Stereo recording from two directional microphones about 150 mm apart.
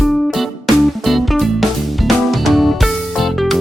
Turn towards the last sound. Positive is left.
turn(degrees=0)  # may be behind; listen again after turning